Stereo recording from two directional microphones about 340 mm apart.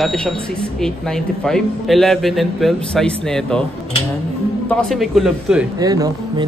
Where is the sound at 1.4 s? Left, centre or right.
Centre.